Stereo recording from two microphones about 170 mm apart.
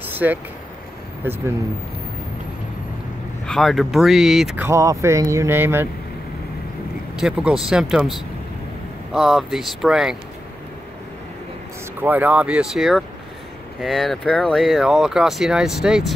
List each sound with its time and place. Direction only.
0.1 s a sound: 10° right (ahead or behind)
1.2 s speech: 10° right (ahead or behind)
3.4 s speech: centre (ahead or behind)
4.6 s speech: 15° right (ahead or behind)
7.2 s speech: 5° right (ahead or behind)
12.0 s speech: 10° right (ahead or behind)